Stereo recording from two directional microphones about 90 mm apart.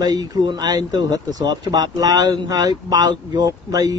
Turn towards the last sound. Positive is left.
turn(degrees=-45)  # may be behind; listen again after turning